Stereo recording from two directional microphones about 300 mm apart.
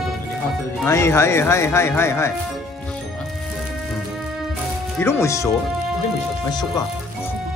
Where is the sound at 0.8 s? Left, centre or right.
Centre.